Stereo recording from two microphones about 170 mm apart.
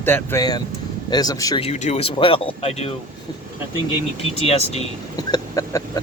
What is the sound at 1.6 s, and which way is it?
Speech, 40° left (ahead or behind).